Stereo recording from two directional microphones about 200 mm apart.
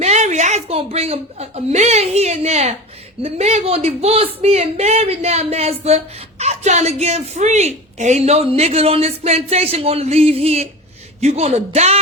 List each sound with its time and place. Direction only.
0.0 s a woman's voice: 35° right (ahead or behind)